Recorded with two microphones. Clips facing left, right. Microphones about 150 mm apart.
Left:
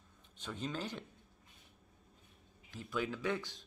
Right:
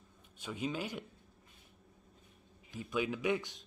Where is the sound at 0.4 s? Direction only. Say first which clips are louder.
Right 3 dB; 10° right (ahead or behind).